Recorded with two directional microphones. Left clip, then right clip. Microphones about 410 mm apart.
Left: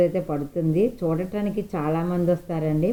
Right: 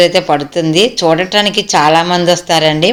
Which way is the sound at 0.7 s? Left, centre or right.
Right.